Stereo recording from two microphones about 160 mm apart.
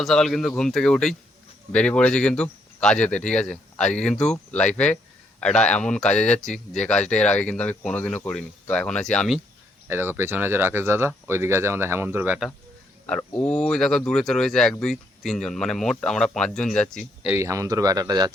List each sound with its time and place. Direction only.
0.0 s a man's voice: centre (ahead or behind)
9.9 s speech: 15° right (ahead or behind)
13.3 s speech: 5° left (ahead or behind)
17.2 s speech: 15° right (ahead or behind)